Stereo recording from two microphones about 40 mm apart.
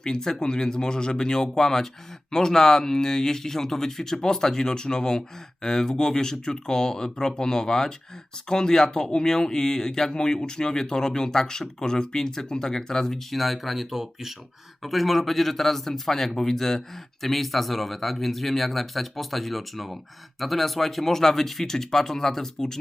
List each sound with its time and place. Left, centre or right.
0.0 s speech: centre
13.3 s speech: centre